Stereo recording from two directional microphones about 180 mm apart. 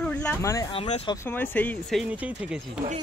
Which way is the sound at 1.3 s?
10° left (ahead or behind).